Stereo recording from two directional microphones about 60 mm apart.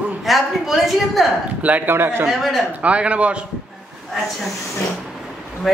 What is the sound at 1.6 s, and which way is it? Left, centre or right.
Speech, right.